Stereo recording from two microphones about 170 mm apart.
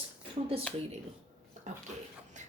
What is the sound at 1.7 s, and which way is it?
Speech, 45° right (ahead or behind).